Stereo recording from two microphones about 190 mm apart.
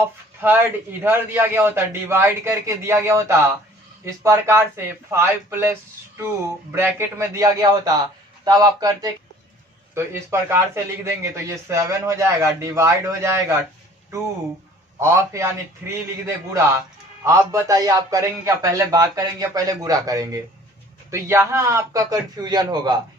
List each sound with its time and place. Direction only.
0.0 s a man's voice: 10° right (ahead or behind)
14.9 s a man's voice: 15° right (ahead or behind)